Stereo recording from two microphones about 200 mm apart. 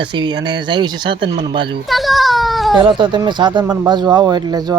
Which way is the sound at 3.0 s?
25° right (ahead or behind).